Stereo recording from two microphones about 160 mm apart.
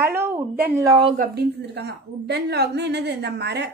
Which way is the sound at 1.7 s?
90° right.